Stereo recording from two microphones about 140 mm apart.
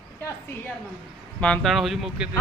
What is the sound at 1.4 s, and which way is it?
Speech, 5° left (ahead or behind).